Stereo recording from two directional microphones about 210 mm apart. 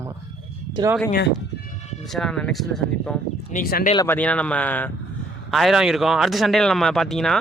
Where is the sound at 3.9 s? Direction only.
10° left (ahead or behind).